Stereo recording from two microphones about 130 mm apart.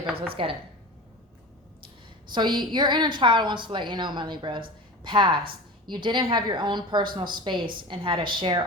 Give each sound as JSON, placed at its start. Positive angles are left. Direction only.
{"t": 0.1, "sound": "a woman's voice", "side_deg": -45}
{"t": 2.3, "sound": "a woman's voice", "side_deg": -35}